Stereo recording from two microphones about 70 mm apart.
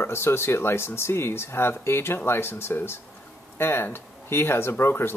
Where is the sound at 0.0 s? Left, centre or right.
Left.